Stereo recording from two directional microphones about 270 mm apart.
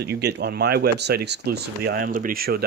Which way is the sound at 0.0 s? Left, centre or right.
Right.